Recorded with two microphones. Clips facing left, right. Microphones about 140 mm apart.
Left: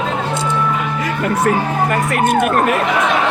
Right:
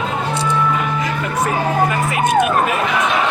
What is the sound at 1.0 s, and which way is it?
Vehicle, 65° left (ahead or behind).